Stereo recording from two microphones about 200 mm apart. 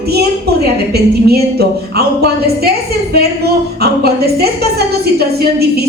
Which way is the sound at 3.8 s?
50° right (ahead or behind).